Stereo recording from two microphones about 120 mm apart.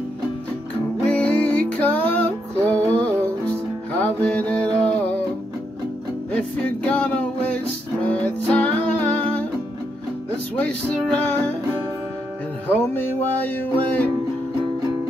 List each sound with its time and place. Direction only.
1.0 s music: 10° left (ahead or behind)
6.3 s music: 10° left (ahead or behind)
11.1 s music: 10° left (ahead or behind)
12.6 s music: 15° left (ahead or behind)